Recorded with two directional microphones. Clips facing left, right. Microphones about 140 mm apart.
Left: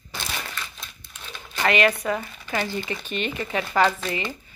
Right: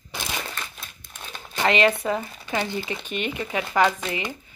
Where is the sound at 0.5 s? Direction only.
45° right (ahead or behind).